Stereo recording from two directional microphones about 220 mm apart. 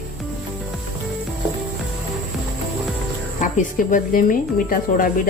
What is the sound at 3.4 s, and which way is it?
Speech, 35° left (ahead or behind).